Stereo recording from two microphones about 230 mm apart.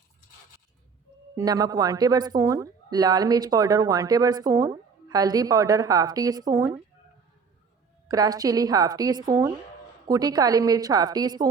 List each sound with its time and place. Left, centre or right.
1.4 s speech: centre
8.0 s speech: centre